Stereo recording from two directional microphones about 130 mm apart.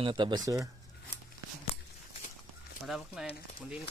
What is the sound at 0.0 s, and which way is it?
Speech, 40° right (ahead or behind).